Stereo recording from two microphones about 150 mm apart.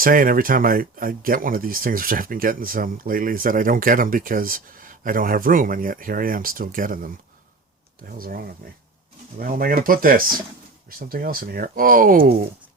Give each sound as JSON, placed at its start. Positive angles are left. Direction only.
{"t": 0.0, "sound": "speech", "side_deg": -70}
{"t": 8.2, "sound": "speech", "side_deg": -75}